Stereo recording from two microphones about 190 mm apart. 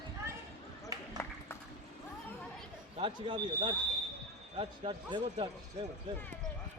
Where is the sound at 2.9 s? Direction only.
25° right (ahead or behind).